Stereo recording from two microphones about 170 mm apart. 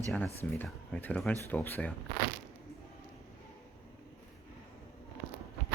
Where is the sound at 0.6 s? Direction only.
10° left (ahead or behind).